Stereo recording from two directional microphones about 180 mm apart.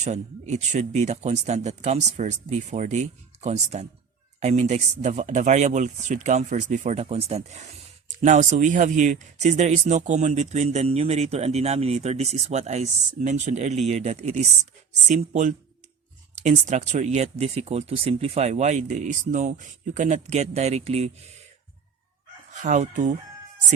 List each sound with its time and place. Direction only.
0.0 s speech: 40° right (ahead or behind)
22.5 s chicken: 40° right (ahead or behind)